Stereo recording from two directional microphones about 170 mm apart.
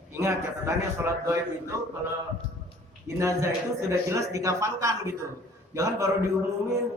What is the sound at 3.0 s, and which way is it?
A man's voice, 15° right (ahead or behind).